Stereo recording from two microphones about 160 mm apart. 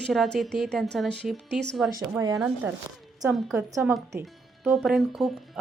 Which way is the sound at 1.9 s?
25° right (ahead or behind).